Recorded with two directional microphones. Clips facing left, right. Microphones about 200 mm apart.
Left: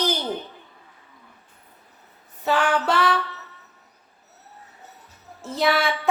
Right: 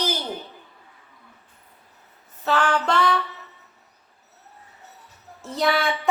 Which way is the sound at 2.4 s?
10° left (ahead or behind).